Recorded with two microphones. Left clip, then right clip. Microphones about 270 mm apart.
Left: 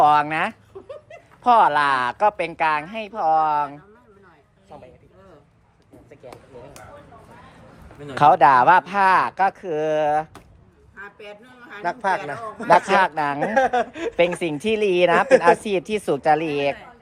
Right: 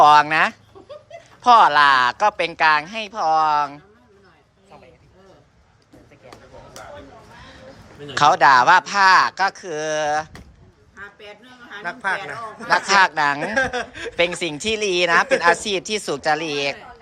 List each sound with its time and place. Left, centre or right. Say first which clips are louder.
0.0 s speech: right 4 dB; centre
8.0 s speech: even; centre
11.0 s a sound: even; centre
11.8 s a man's voice: left 2 dB; left
12.9 s speech: right 3 dB; centre
13.4 s a man's voice: left 3 dB; left
14.2 s speech: even; centre